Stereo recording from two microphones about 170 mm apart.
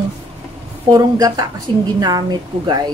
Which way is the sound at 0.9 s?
20° right (ahead or behind).